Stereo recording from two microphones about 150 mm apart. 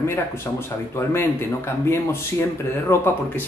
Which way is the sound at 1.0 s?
15° left (ahead or behind).